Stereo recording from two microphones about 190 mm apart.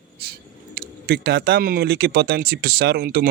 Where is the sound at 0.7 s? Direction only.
55° right (ahead or behind).